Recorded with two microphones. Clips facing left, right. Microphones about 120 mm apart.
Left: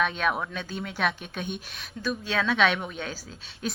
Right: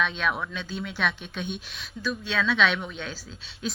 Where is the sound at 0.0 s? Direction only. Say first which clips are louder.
Left 1 dB; 45° left (ahead or behind).